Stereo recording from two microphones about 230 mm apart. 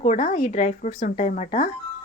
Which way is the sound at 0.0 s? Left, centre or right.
Left.